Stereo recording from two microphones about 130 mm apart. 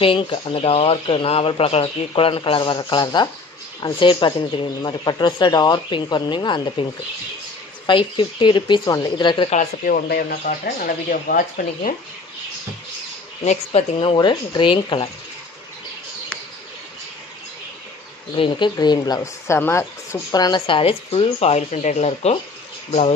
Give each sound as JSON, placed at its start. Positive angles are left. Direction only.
{"t": 0.0, "sound": "speech", "side_deg": 45}
{"t": 9.5, "sound": "speech", "side_deg": 80}
{"t": 13.4, "sound": "speech", "side_deg": 50}
{"t": 14.1, "sound": "speech", "side_deg": 35}
{"t": 18.3, "sound": "speech", "side_deg": 40}